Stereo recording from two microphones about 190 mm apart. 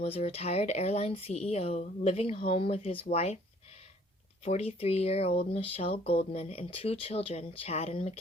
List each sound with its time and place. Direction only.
0.0 s speech: 30° left (ahead or behind)
4.4 s speech: 30° left (ahead or behind)